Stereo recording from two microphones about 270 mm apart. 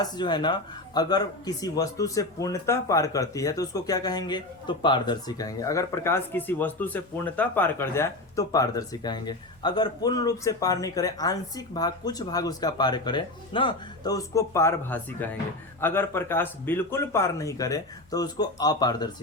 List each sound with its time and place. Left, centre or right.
0.0 s speech: centre